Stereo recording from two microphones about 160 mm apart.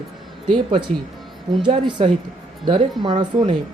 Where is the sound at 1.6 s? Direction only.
30° right (ahead or behind).